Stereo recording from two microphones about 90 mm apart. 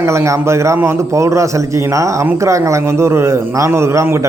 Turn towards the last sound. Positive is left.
turn(degrees=-35)  # may be behind; listen again after turning